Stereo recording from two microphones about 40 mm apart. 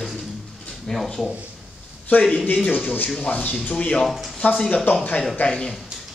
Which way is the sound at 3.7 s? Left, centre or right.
Left.